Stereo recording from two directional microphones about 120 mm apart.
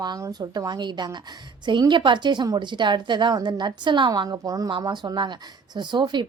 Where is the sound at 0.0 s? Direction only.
35° right (ahead or behind).